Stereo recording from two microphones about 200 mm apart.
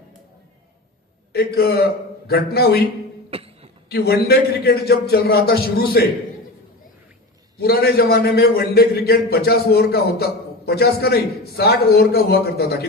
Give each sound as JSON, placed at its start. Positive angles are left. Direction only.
{"t": 1.3, "sound": "a man's voice", "side_deg": 50}
{"t": 3.2, "sound": "a sound", "side_deg": -30}
{"t": 3.8, "sound": "a man's voice", "side_deg": 50}
{"t": 7.6, "sound": "a man's voice", "side_deg": 50}